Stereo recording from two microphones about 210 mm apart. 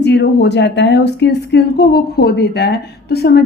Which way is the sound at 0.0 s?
55° left (ahead or behind).